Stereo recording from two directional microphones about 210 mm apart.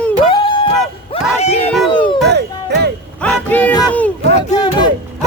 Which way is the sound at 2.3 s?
55° right (ahead or behind).